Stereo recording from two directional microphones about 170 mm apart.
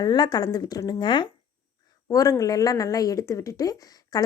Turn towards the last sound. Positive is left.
turn(degrees=20)  # may be behind; listen again after turning